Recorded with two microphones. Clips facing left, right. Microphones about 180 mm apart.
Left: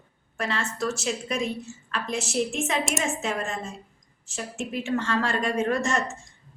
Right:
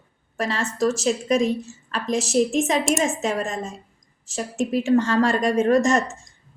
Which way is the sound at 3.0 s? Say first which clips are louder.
Right 4 dB; 40° right (ahead or behind).